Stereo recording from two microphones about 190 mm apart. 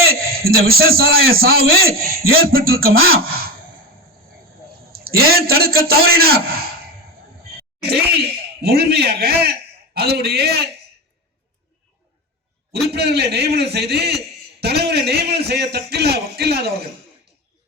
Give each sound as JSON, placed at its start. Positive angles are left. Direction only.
{"t": 0.1, "sound": "a sound", "side_deg": -50}
{"t": 0.7, "sound": "a man's voice", "side_deg": -55}
{"t": 4.9, "sound": "a man's voice", "side_deg": -55}
{"t": 7.9, "sound": "a man's voice", "side_deg": -55}
{"t": 12.9, "sound": "a man's voice", "side_deg": -60}